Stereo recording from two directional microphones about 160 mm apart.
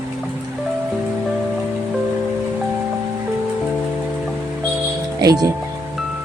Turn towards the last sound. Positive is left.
turn(degrees=-25)  # may be behind; listen again after turning